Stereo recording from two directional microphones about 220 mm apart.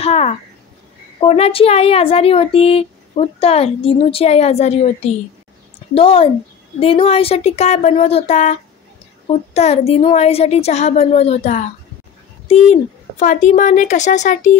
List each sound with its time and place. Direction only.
0.0 s speech: 30° left (ahead or behind)